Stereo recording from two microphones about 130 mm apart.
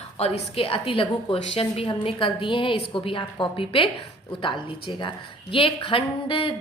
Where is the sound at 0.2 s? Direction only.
50° left (ahead or behind).